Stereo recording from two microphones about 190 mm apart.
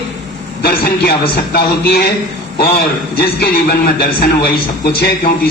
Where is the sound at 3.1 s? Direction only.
55° left (ahead or behind).